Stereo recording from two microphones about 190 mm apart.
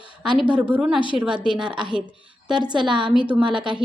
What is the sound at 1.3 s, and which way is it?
A woman's voice, 25° right (ahead or behind).